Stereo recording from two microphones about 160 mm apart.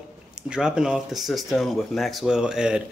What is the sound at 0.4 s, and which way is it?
Speech, 5° right (ahead or behind).